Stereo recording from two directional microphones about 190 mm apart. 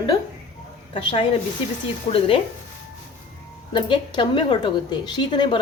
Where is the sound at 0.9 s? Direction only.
30° left (ahead or behind).